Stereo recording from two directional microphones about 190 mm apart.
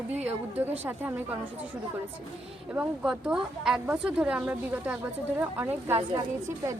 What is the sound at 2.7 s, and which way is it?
A woman's voice, 5° right (ahead or behind).